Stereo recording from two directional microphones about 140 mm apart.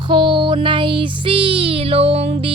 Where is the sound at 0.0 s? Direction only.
35° right (ahead or behind).